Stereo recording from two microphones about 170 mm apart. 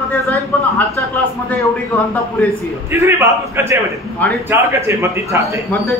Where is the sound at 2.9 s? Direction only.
15° right (ahead or behind).